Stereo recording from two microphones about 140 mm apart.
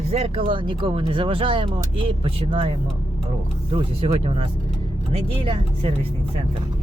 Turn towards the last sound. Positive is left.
turn(degrees=-40)  # may be behind; listen again after turning